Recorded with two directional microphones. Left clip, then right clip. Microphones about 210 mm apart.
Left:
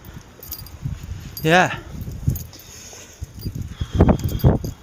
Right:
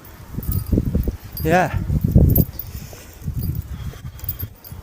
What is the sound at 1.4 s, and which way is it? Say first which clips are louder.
Speech: left 2 dB; 25° left (ahead or behind).